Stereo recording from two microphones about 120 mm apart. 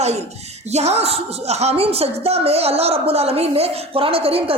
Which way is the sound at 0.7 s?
65° right (ahead or behind).